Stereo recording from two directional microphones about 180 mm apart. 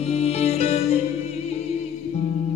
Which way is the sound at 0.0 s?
35° left (ahead or behind).